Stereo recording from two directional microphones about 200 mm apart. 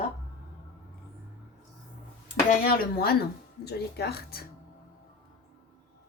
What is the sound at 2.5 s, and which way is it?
A woman's voice, 45° left (ahead or behind).